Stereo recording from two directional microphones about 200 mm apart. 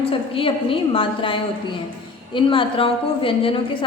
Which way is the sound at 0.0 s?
25° left (ahead or behind).